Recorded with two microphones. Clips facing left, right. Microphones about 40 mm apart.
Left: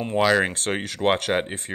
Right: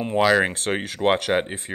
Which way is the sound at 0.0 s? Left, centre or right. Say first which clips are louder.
Right 1 dB; centre.